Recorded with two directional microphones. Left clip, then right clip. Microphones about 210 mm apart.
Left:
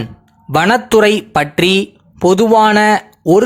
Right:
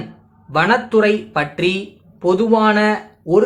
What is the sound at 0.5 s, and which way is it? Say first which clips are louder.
Speech: left 4 dB; 50° left (ahead or behind).